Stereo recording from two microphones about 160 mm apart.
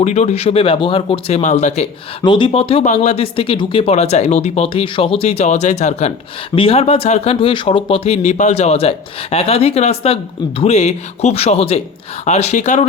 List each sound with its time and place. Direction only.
0.0 s speech: 45° left (ahead or behind)
2.2 s speech: 30° left (ahead or behind); by 12.8 s 50° left (ahead or behind)